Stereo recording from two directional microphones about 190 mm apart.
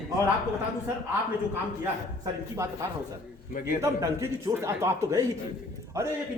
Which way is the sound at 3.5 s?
45° left (ahead or behind).